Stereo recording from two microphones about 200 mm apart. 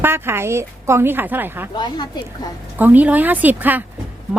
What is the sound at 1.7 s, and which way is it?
Speech, 20° left (ahead or behind).